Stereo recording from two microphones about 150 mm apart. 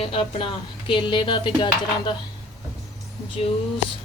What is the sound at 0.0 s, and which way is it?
Speech, 35° left (ahead or behind).